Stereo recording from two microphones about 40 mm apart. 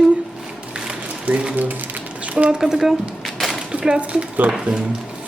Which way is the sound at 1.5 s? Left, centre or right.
Right.